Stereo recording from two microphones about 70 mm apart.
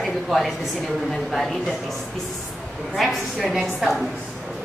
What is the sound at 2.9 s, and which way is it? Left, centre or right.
A woman's voice, centre.